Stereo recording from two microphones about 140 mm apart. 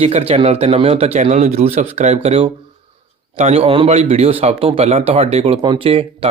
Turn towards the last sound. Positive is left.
turn(degrees=-40)  # may be behind; listen again after turning